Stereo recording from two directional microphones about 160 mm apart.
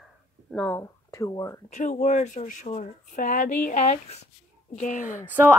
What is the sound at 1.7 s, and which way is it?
Speech, 50° left (ahead or behind).